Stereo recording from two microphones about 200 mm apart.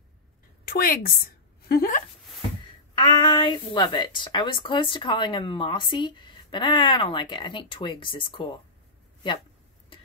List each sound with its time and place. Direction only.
0.7 s a woman's voice: 45° left (ahead or behind)
2.9 s a woman's voice: 20° left (ahead or behind)